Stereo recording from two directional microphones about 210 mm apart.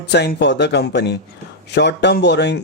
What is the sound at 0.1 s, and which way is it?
Speech, 55° left (ahead or behind).